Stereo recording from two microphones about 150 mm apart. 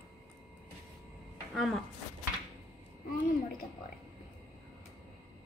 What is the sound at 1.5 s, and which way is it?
Speech, centre (ahead or behind).